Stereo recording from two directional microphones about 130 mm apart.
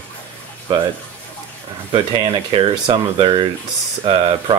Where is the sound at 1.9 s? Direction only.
40° right (ahead or behind).